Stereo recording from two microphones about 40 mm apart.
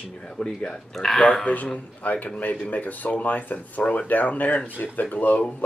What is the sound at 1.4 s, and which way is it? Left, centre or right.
A man's voice, left.